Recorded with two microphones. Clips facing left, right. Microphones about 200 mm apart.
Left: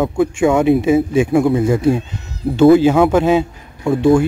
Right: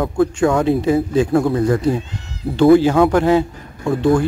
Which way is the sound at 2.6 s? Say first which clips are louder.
Left 2 dB; 20° left (ahead or behind).